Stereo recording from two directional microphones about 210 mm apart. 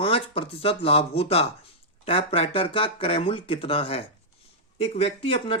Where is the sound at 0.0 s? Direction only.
25° left (ahead or behind).